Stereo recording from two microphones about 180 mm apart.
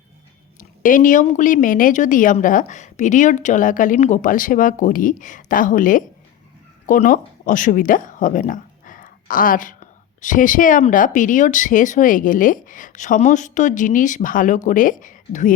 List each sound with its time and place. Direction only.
0.8 s speech: 50° left (ahead or behind)